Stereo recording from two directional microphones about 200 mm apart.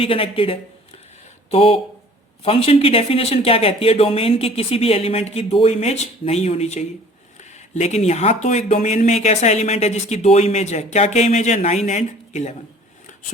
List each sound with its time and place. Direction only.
0.0 s speech: 25° left (ahead or behind)